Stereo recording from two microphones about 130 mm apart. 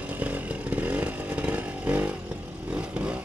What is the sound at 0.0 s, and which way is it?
Chainsaw, 10° right (ahead or behind).